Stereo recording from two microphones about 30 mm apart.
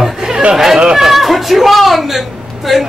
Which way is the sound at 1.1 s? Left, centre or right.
Centre.